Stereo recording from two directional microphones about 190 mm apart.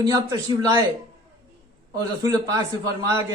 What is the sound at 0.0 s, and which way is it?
Speech, 20° right (ahead or behind).